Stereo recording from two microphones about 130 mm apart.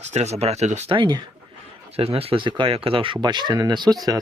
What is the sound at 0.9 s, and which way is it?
Speech, 40° right (ahead or behind).